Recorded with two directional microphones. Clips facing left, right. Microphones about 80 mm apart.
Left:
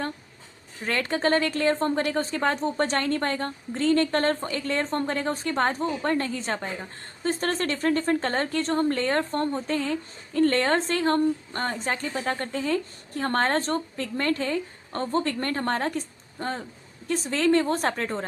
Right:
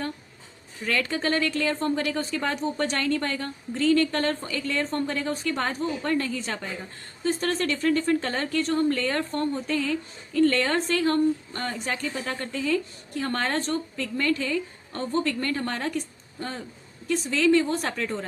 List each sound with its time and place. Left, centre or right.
0.9 s a woman's voice: left